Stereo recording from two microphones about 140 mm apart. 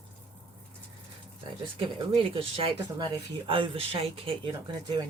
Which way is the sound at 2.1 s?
40° right (ahead or behind).